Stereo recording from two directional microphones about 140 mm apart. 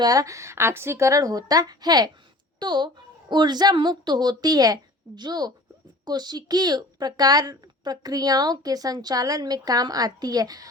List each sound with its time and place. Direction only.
0.0 s a woman's voice: 25° right (ahead or behind)